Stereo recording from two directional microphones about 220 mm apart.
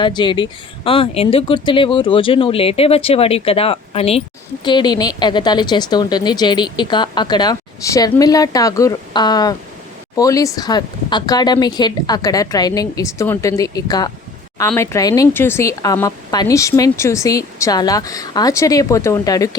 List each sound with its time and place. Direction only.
0.0 s speech: 20° left (ahead or behind)